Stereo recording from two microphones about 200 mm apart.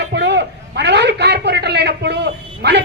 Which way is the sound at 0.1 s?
60° right (ahead or behind).